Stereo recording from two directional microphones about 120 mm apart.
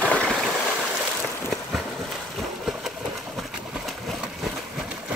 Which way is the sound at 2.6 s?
Centre (ahead or behind).